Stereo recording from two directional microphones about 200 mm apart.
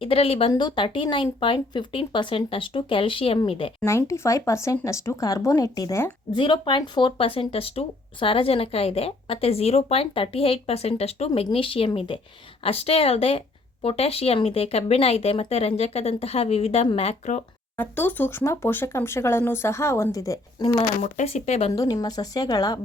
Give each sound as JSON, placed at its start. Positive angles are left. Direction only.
{"t": 0.0, "sound": "speech", "side_deg": 30}
{"t": 3.8, "sound": "speech", "side_deg": 15}
{"t": 17.7, "sound": "speech", "side_deg": 10}
{"t": 21.0, "sound": "speech", "side_deg": 35}
{"t": 21.7, "sound": "speech", "side_deg": 20}